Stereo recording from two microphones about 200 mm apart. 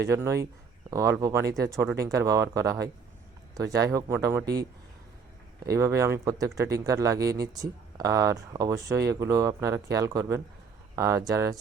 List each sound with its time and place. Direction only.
0.1 s speech: 15° right (ahead or behind)
5.7 s speech: 15° right (ahead or behind)